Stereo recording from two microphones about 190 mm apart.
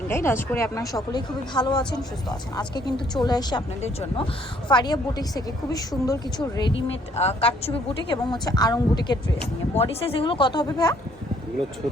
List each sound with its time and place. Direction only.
0.1 s a woman's voice: 10° left (ahead or behind)
4.7 s a woman's voice: 20° left (ahead or behind)
7.2 s a woman's voice: 30° left (ahead or behind)